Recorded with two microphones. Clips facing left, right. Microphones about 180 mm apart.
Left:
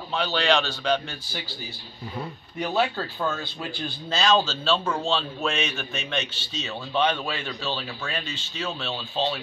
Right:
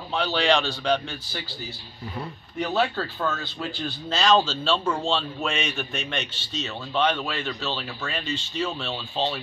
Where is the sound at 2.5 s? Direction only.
10° left (ahead or behind).